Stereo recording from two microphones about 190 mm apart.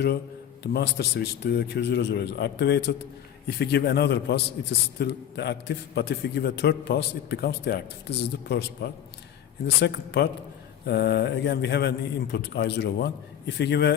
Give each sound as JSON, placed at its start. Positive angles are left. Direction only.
{"t": 0.6, "sound": "a man's voice", "side_deg": 60}